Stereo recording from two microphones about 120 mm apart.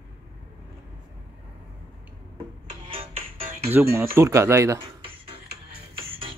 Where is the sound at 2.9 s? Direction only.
50° right (ahead or behind).